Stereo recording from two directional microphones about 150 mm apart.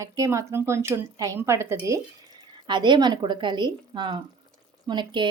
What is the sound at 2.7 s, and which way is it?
Speech, 30° right (ahead or behind).